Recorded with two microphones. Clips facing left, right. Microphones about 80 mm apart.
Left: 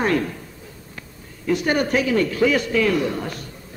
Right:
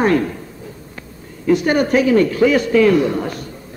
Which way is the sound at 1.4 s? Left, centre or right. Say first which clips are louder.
Right 5 dB; right.